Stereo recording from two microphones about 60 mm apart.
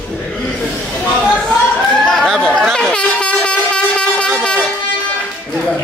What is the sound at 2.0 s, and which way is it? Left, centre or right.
Chatter, centre.